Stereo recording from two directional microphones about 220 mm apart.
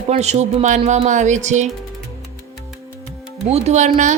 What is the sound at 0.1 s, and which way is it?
Speech, 30° right (ahead or behind).